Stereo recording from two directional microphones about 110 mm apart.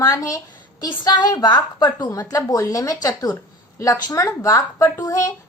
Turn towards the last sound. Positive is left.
turn(degrees=30)  # may be behind; listen again after turning